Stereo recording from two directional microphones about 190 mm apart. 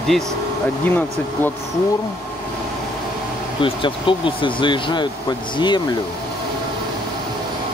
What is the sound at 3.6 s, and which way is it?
Speech, 25° left (ahead or behind).